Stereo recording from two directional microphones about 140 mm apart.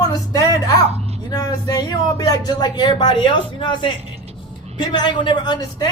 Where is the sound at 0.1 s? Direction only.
25° left (ahead or behind).